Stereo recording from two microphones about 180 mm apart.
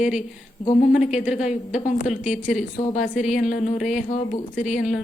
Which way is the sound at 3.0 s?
45° left (ahead or behind).